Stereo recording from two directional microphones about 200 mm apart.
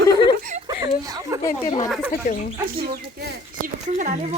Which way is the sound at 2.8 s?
45° right (ahead or behind).